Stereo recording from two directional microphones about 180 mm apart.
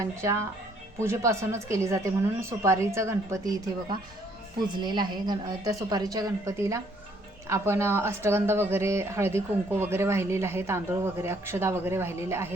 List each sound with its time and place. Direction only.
0.0 s a woman's voice: 15° right (ahead or behind)